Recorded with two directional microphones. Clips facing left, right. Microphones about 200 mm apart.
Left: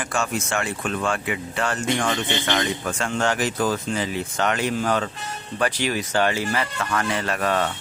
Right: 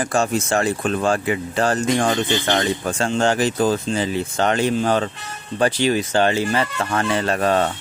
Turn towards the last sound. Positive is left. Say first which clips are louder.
# right 5 dB
turn(degrees=-30)  # may be behind; listen again after turning